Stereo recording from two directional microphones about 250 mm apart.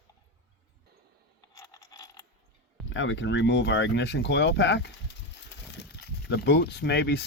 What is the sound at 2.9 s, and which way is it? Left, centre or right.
Speech, left.